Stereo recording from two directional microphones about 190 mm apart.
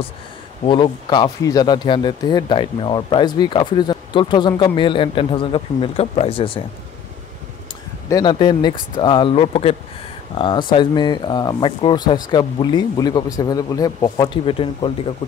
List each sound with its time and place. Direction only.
0.7 s speech: 25° left (ahead or behind)
8.1 s speech: 20° left (ahead or behind)